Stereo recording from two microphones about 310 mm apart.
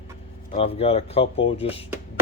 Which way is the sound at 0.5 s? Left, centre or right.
Centre.